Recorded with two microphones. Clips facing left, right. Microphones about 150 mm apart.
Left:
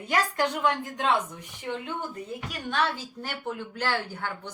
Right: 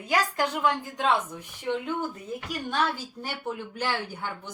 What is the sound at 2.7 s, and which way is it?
Speech, 10° right (ahead or behind).